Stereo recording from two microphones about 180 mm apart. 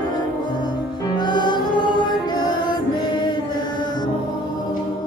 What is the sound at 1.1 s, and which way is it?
Music, 25° left (ahead or behind).